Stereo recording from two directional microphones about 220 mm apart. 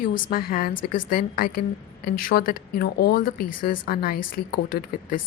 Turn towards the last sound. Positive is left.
turn(degrees=40)  # may be behind; listen again after turning